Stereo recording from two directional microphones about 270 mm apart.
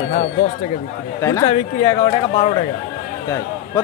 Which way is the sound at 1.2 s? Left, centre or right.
Centre.